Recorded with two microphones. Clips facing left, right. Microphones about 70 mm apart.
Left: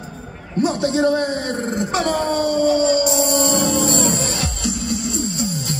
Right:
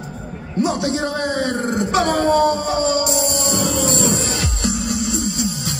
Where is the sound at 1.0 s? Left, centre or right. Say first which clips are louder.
Left 2 dB; right.